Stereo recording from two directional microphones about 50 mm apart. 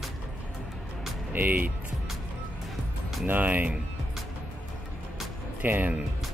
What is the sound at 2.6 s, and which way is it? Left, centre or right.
Music, centre.